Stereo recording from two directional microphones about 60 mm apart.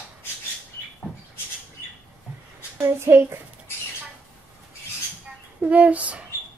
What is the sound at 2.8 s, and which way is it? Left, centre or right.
Speech, right.